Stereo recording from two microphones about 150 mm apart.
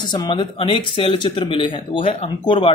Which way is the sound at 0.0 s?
30° left (ahead or behind).